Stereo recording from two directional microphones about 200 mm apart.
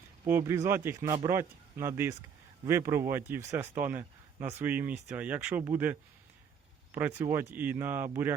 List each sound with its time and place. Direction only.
0.3 s speech: 10° right (ahead or behind)
7.2 s speech: 10° right (ahead or behind)